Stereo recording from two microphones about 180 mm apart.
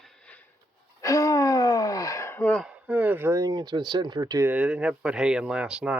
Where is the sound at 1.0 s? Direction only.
20° left (ahead or behind).